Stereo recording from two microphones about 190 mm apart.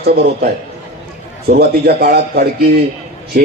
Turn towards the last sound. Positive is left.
turn(degrees=-50)  # may be behind; listen again after turning